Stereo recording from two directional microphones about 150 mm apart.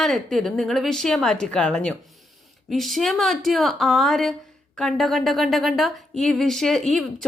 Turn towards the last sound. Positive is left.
turn(degrees=0)  # may be behind; listen again after turning